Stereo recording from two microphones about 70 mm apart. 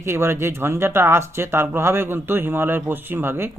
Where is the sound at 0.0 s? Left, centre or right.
Right.